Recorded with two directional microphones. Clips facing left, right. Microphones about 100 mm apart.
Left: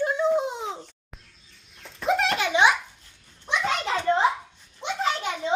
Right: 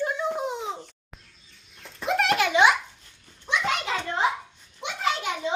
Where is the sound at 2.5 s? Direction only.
25° left (ahead or behind).